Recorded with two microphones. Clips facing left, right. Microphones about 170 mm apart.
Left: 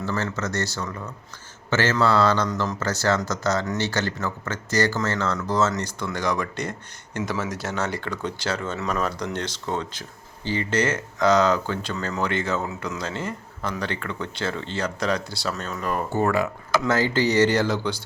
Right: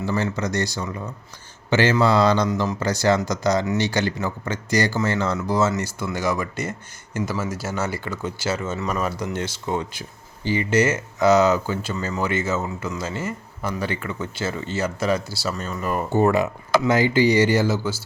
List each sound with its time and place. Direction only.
0.0 s speech: 15° right (ahead or behind)
16.1 s speech: 20° right (ahead or behind)